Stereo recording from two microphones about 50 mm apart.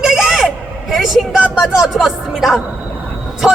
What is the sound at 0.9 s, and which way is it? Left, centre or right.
Vehicle, centre.